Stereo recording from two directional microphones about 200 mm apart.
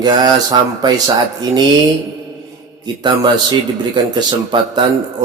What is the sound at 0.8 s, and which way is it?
Speech, 20° right (ahead or behind).